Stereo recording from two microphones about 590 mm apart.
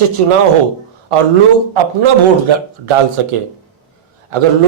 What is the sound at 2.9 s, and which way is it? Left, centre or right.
Speech, right.